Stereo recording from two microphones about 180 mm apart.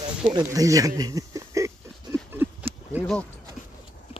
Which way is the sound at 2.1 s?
5° left (ahead or behind).